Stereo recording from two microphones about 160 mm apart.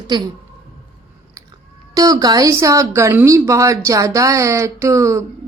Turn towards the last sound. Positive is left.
turn(degrees=-20)  # may be behind; listen again after turning